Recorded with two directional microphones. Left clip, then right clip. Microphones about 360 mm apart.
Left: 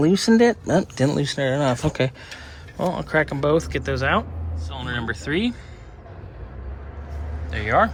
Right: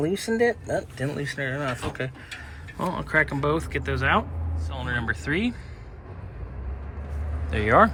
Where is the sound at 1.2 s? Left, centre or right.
Centre.